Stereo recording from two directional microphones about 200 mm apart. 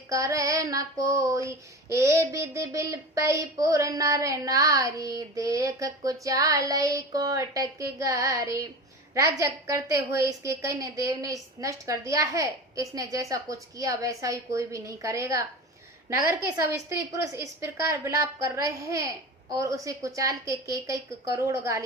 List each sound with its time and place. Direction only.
0.1 s child singing: 15° right (ahead or behind)